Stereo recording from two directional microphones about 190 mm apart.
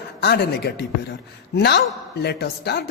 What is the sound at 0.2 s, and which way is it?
Speech, 55° left (ahead or behind).